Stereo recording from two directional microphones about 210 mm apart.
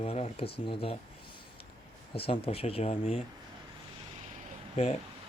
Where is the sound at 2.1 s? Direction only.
25° left (ahead or behind).